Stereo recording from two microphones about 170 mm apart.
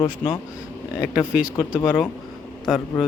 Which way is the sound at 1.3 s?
5° right (ahead or behind).